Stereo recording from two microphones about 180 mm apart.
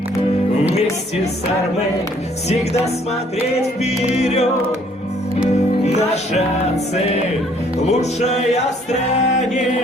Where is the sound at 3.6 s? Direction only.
35° left (ahead or behind).